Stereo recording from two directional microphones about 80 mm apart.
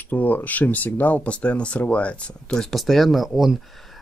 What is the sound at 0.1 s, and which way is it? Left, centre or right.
Speech, left.